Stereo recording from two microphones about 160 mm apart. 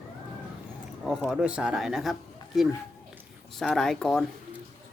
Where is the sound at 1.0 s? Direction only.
5° right (ahead or behind).